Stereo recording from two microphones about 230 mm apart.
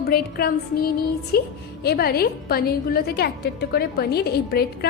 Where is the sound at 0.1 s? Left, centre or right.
Left.